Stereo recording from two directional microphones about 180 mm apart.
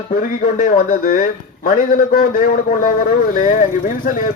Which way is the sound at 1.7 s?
50° left (ahead or behind).